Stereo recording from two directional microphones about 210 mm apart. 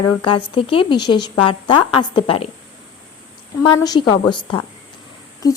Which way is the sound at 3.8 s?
20° left (ahead or behind).